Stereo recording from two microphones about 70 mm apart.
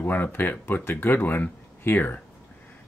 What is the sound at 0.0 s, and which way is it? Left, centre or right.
Speech, left.